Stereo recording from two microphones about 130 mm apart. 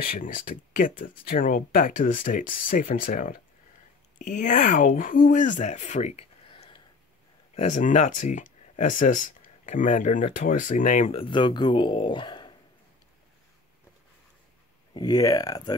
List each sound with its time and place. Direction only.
0.1 s speech: 90° left
4.2 s speech: 70° left (ahead or behind)
6.5 s a sound: 45° left (ahead or behind)
7.5 s speech: 65° left (ahead or behind)
11.1 s speech: 40° left (ahead or behind)
15.0 s speech: 30° left (ahead or behind)